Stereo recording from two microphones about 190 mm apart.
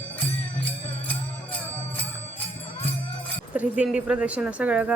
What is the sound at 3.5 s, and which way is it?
Speech, 5° right (ahead or behind).